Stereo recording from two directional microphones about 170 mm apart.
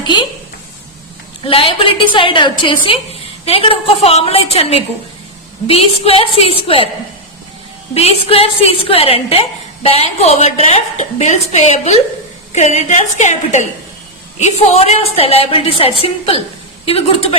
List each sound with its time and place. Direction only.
1.5 s a woman's voice: 30° left (ahead or behind)
7.9 s a woman's voice: 35° left (ahead or behind)